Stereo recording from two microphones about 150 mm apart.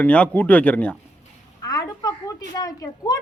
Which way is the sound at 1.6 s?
25° left (ahead or behind).